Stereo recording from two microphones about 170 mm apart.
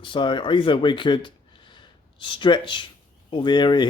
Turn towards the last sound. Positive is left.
turn(degrees=25)  # may be behind; listen again after turning